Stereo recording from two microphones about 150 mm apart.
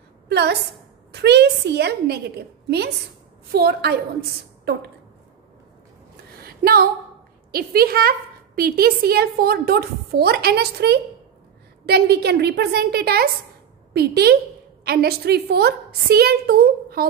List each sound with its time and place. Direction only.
0.3 s a woman's voice: 90° right
6.4 s a sound: 90° right
7.5 s a woman's voice: 90° right